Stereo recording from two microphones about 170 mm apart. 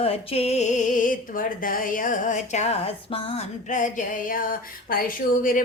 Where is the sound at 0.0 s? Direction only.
35° left (ahead or behind).